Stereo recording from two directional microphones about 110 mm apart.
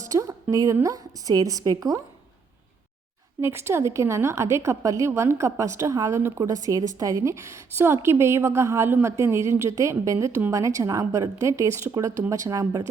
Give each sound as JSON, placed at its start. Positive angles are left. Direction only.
{"t": 0.0, "sound": "a sound", "side_deg": -30}
{"t": 0.5, "sound": "a woman's voice", "side_deg": -30}
{"t": 3.4, "sound": "a woman's voice", "side_deg": -25}